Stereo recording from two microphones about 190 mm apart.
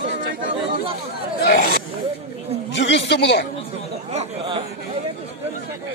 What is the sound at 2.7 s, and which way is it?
Speech, 65° left (ahead or behind).